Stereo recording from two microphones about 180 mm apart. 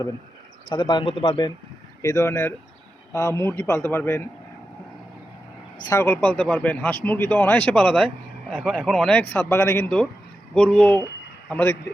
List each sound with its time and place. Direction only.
0.7 s speech: 25° left (ahead or behind)
5.8 s speech: 15° left (ahead or behind)